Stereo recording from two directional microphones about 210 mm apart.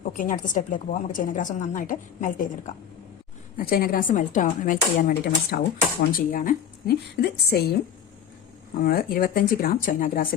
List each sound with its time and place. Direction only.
0.1 s a woman's voice: 40° left (ahead or behind)
3.6 s a woman's voice: 45° left (ahead or behind)
8.8 s speech: 45° left (ahead or behind)